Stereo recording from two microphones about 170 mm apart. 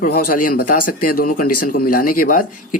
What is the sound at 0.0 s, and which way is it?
Speech, 55° left (ahead or behind).